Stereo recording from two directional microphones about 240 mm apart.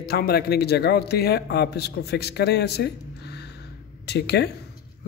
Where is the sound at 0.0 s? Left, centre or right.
Left.